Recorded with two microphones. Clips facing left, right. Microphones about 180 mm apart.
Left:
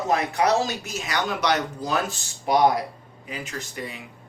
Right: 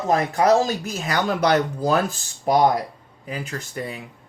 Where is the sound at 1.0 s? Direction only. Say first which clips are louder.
Right 4 dB; 50° right (ahead or behind).